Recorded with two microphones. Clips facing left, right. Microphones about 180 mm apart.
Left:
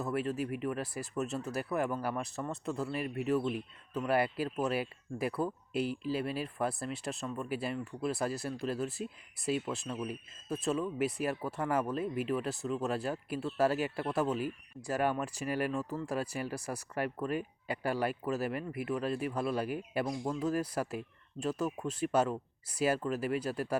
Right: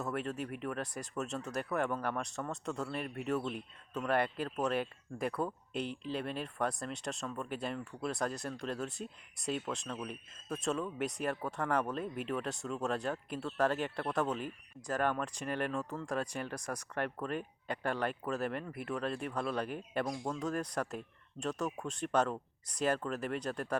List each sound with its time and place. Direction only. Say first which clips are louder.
0.0 s speech: left 4 dB; 5° left (ahead or behind)